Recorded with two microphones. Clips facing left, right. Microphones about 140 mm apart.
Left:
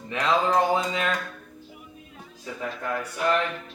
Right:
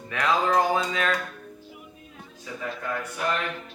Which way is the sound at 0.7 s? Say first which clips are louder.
Left 1 dB; 25° left (ahead or behind).